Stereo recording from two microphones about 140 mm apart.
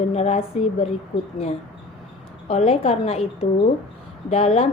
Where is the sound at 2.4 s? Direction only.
45° left (ahead or behind).